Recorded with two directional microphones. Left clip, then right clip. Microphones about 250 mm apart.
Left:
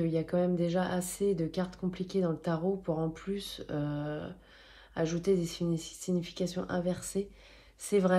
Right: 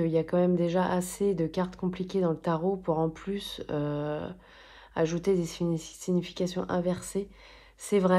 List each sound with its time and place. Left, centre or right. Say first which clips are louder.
0.0 s speech: right 4 dB; right